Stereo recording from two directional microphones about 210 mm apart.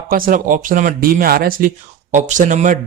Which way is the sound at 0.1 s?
40° right (ahead or behind).